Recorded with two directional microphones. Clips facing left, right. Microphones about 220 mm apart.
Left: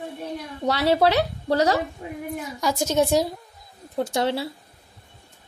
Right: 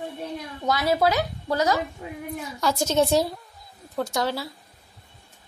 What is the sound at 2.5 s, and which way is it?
Speech, 15° left (ahead or behind).